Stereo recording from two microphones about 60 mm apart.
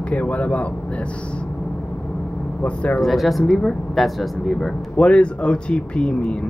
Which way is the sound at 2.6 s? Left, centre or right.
Left.